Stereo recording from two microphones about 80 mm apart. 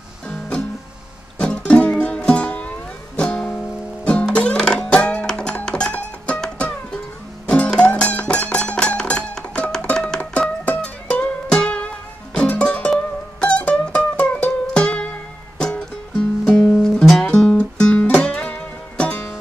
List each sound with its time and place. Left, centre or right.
0.3 s music: centre